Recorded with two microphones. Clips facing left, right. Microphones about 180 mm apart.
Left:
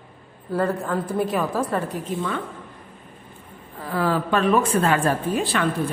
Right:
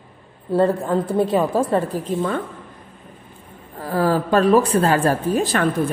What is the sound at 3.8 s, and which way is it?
A woman's voice, 40° right (ahead or behind).